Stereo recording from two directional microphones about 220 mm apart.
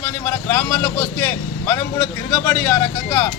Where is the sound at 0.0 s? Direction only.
10° left (ahead or behind).